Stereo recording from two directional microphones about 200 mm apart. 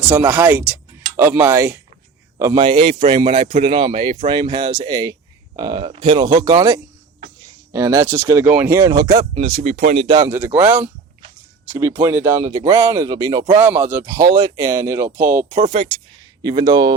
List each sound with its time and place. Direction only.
0.0 s speech: 10° right (ahead or behind)
9.3 s speech: 30° right (ahead or behind)
10.0 s speech: 20° right (ahead or behind)
12.0 s speech: 15° right (ahead or behind)
15.5 s speech: 30° right (ahead or behind)
16.4 s speech: 20° right (ahead or behind)